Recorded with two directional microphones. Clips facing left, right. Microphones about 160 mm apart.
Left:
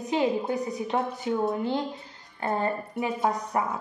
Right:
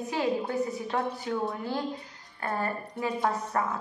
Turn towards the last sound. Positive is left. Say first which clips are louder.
# left 2 dB
turn(degrees=15)  # may be behind; listen again after turning